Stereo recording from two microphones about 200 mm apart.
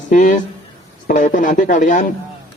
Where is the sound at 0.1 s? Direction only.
40° left (ahead or behind).